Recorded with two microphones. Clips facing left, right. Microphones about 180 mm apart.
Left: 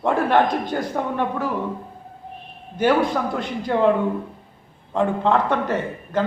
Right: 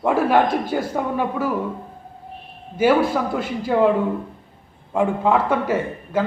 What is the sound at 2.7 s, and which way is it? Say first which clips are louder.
A man's voice: right 2 dB; 5° right (ahead or behind).